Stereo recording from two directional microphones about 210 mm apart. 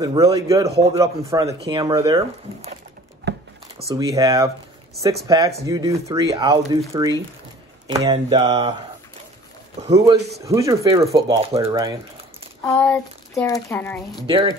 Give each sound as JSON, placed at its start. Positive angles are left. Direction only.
{"t": 0.0, "sound": "speech", "side_deg": -20}
{"t": 0.7, "sound": "speech", "side_deg": -30}
{"t": 0.9, "sound": "speech", "side_deg": -15}
{"t": 3.3, "sound": "a sound", "side_deg": -50}
{"t": 3.9, "sound": "speech", "side_deg": -15}
{"t": 9.8, "sound": "speech", "side_deg": -15}
{"t": 12.6, "sound": "child singing", "side_deg": 10}
{"t": 13.5, "sound": "speech", "side_deg": 10}
{"t": 14.2, "sound": "speech", "side_deg": -20}